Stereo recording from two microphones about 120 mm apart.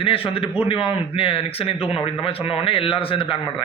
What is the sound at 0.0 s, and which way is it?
A man's voice, 50° left (ahead or behind).